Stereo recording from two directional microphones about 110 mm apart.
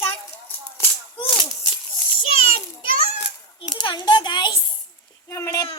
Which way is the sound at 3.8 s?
45° left (ahead or behind).